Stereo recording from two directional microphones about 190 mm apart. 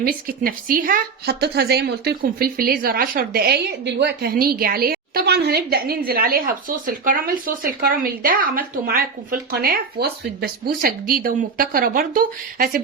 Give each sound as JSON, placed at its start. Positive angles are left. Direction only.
{"t": 0.0, "sound": "speech", "side_deg": -50}